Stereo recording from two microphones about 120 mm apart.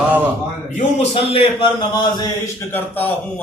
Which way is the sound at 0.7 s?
90° left.